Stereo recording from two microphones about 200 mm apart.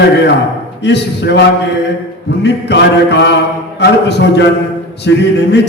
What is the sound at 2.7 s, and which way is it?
Music, 60° left (ahead or behind).